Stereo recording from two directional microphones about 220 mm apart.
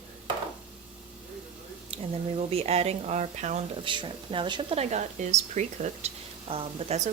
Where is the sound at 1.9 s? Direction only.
25° right (ahead or behind).